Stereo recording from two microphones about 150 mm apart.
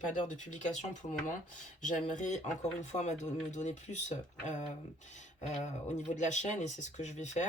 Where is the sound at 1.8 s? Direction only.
55° left (ahead or behind).